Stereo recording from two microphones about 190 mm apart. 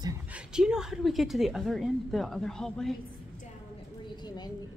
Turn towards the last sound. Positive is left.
turn(degrees=20)  # may be behind; listen again after turning